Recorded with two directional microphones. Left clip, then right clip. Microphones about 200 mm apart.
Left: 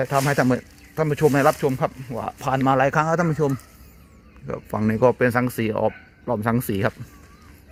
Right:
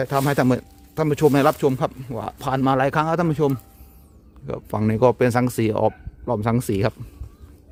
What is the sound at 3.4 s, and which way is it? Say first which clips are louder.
Speech: right 2 dB; 35° right (ahead or behind).